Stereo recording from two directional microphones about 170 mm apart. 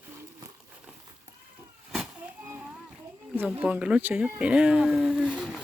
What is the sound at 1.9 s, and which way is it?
Cat, centre (ahead or behind).